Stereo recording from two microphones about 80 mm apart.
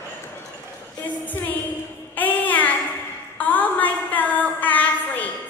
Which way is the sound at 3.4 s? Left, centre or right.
Left.